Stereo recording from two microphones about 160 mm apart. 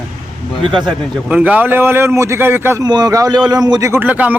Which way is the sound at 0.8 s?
10° right (ahead or behind).